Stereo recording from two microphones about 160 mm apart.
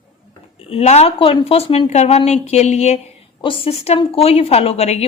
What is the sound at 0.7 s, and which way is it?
A woman's voice, 40° left (ahead or behind).